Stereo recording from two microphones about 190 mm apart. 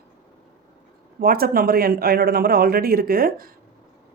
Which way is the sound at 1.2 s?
50° right (ahead or behind).